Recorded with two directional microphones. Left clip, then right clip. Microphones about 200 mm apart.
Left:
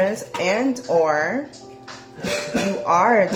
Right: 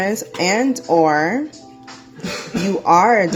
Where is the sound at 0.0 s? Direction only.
40° right (ahead or behind).